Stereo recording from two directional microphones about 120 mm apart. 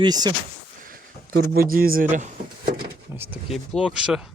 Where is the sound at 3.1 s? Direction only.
20° right (ahead or behind).